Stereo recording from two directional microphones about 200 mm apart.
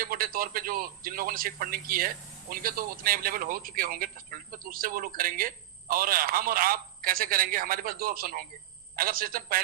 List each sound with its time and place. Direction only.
0.0 s a man's voice: 45° right (ahead or behind)